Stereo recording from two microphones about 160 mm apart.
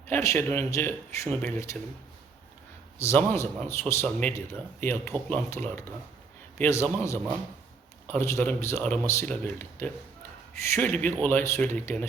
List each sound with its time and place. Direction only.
0.1 s speech: 15° left (ahead or behind)
3.0 s speech: 15° left (ahead or behind)